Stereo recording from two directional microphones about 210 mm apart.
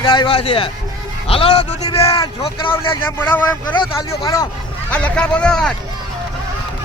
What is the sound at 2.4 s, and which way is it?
Speech, 25° left (ahead or behind).